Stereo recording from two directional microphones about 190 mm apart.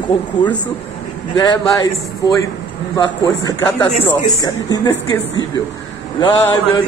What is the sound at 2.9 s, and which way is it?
A man's voice, 20° left (ahead or behind).